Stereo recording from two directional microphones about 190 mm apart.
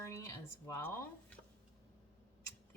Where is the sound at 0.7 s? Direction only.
15° left (ahead or behind).